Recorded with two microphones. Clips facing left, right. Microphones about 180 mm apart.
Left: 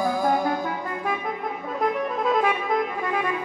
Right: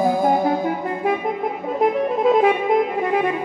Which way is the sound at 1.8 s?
25° right (ahead or behind).